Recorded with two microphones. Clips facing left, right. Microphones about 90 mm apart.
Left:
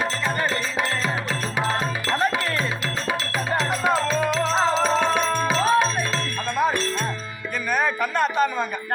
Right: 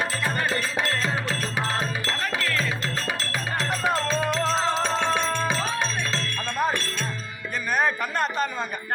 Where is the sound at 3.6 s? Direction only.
5° left (ahead or behind).